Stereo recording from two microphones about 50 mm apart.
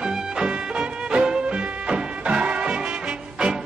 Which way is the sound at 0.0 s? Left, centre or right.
Centre.